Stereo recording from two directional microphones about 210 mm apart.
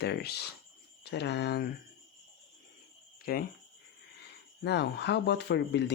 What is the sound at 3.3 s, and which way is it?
Speech, 45° left (ahead or behind).